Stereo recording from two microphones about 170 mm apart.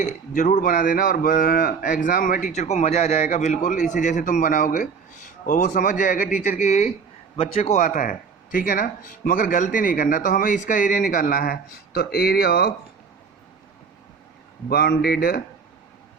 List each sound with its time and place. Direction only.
0.0 s speech: 50° left (ahead or behind); by 12.7 s 65° left (ahead or behind)
14.7 s speech: 65° left (ahead or behind)